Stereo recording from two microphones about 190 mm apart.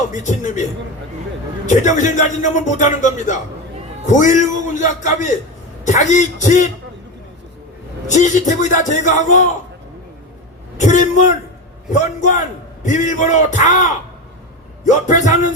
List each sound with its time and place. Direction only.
0.1 s speech: 40° left (ahead or behind)
8.0 s speech: 40° left (ahead or behind)
10.9 s speech: 40° left (ahead or behind)